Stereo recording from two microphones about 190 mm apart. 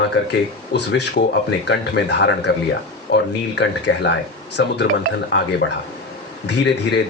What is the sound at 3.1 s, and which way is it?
Speech, 65° left (ahead or behind).